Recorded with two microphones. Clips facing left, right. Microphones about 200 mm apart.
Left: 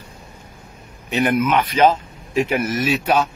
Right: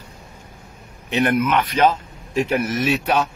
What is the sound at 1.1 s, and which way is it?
Speech, centre (ahead or behind).